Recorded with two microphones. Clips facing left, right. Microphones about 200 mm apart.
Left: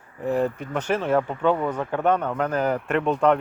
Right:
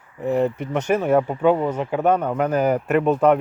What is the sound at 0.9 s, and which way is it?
Speech, 10° right (ahead or behind).